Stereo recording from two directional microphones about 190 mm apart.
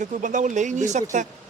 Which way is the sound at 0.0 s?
40° right (ahead or behind).